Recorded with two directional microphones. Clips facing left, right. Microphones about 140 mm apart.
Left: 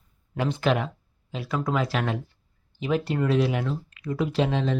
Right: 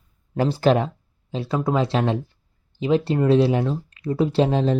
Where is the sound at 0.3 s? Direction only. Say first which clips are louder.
Right 6 dB; 35° right (ahead or behind).